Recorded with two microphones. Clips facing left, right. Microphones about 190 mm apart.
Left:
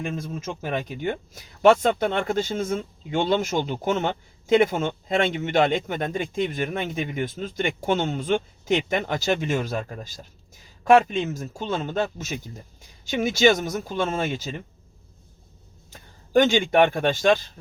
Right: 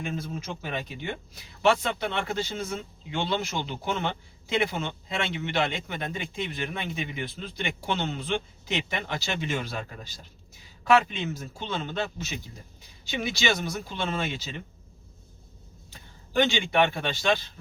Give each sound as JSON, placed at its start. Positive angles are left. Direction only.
{"t": 0.4, "sound": "speech", "side_deg": 45}
{"t": 15.9, "sound": "speech", "side_deg": 45}